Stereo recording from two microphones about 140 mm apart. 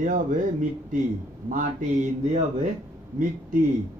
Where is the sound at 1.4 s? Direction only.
65° right (ahead or behind).